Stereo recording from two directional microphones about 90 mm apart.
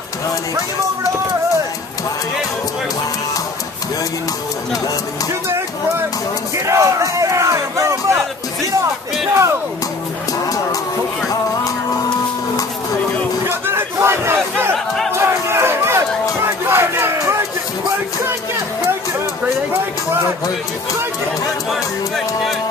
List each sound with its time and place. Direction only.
6.5 s a sound: 35° right (ahead or behind)
9.3 s speech: 30° right (ahead or behind)
13.5 s crowd: 25° right (ahead or behind)
15.1 s chatter: 30° right (ahead or behind)
16.4 s crowd: 25° right (ahead or behind)
21.6 s speech: centre (ahead or behind)